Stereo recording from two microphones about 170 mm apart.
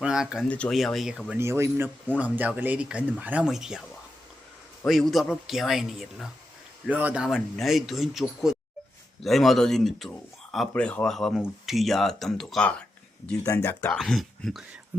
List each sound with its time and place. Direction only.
0.0 s speech: 5° right (ahead or behind)
0.4 s speech: 5° left (ahead or behind)
4.9 s speech: centre (ahead or behind)
13.4 s speech: 20° left (ahead or behind)
13.9 s speech: centre (ahead or behind)